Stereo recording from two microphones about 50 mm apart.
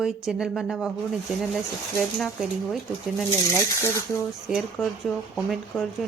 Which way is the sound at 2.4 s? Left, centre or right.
Centre.